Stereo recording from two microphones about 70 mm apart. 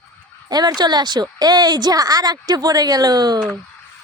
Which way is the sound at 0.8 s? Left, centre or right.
Right.